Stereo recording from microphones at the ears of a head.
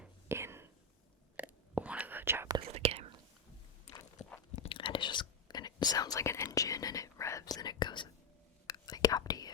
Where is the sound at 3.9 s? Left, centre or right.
Left.